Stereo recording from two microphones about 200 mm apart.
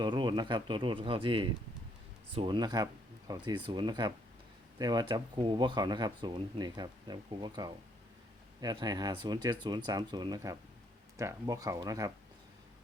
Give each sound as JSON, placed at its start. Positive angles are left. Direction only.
{"t": 0.0, "sound": "speech", "side_deg": -25}